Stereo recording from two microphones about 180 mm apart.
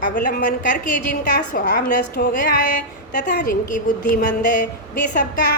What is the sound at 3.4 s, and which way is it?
Speech, 50° left (ahead or behind).